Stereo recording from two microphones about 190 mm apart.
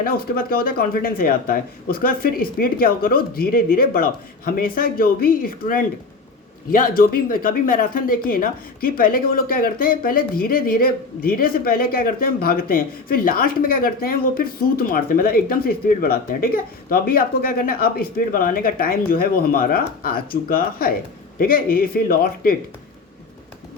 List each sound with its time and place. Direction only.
0.0 s speech: 50° left (ahead or behind)